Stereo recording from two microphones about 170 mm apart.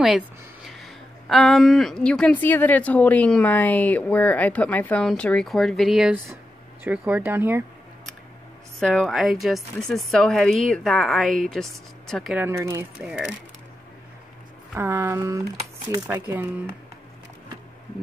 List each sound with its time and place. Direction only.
0.7 s speech: centre (ahead or behind)
8.7 s a woman's voice: 5° left (ahead or behind)
12.4 s speech: 15° right (ahead or behind)
13.0 s a woman's voice: 5° right (ahead or behind)
14.7 s speech: 15° right (ahead or behind)